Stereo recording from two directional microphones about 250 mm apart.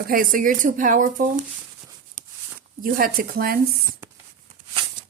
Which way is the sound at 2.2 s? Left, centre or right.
Right.